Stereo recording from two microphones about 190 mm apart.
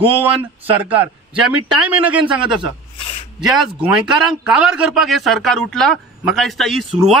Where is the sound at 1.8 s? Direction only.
5° right (ahead or behind).